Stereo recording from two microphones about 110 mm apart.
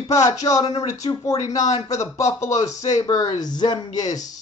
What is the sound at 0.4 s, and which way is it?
Speech, 35° left (ahead or behind).